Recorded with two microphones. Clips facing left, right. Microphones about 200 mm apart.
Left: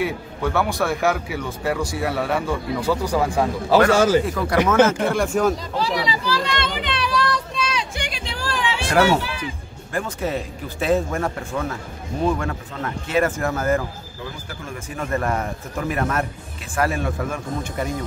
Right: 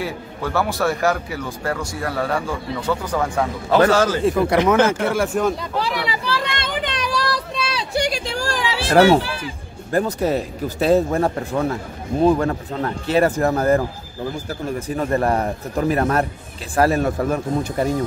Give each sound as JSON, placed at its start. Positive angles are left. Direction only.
{"t": 0.0, "sound": "a man's voice", "side_deg": 0}
{"t": 4.2, "sound": "speech", "side_deg": -25}
{"t": 4.8, "sound": "speech", "side_deg": -5}
{"t": 5.6, "sound": "a sound", "side_deg": -60}
{"t": 8.9, "sound": "a man's voice", "side_deg": -30}